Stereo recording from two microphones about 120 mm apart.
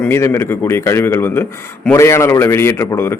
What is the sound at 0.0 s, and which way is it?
A man's voice, 20° left (ahead or behind).